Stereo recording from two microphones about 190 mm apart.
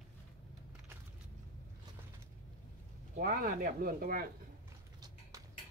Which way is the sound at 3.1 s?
50° right (ahead or behind).